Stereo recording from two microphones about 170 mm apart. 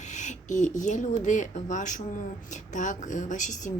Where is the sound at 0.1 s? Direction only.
45° left (ahead or behind).